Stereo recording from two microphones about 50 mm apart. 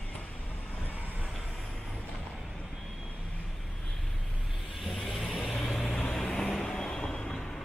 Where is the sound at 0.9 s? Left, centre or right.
Right.